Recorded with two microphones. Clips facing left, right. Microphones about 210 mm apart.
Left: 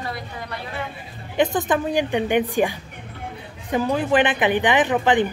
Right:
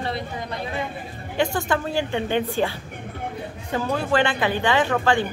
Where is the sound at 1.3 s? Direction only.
20° left (ahead or behind).